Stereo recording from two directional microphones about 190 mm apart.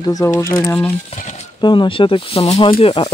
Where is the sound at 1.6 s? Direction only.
25° left (ahead or behind).